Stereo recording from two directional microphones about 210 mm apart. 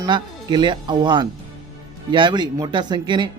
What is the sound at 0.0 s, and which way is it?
Speech, 20° right (ahead or behind).